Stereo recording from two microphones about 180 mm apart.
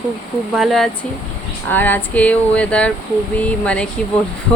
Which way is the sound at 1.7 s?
10° left (ahead or behind).